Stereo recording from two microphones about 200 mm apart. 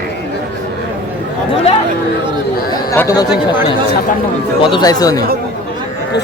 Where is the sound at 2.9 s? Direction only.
15° left (ahead or behind).